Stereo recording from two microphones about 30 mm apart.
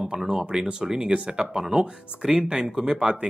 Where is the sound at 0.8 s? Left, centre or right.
Centre.